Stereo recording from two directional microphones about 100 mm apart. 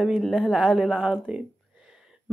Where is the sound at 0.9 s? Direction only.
15° right (ahead or behind).